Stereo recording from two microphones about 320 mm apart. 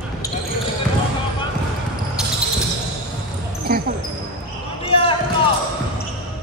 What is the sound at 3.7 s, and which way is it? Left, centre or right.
Basketball bounce, right.